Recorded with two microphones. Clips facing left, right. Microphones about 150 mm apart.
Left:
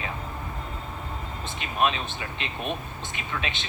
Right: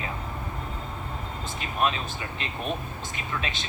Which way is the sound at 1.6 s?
20° left (ahead or behind).